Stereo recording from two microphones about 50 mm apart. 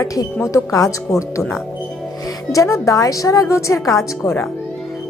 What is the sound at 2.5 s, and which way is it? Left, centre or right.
A woman's voice, left.